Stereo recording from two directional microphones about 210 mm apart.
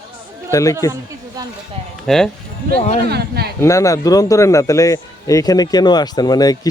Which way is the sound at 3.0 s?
50° right (ahead or behind).